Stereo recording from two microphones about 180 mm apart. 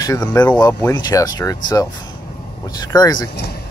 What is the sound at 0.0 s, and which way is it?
Speech, 20° left (ahead or behind).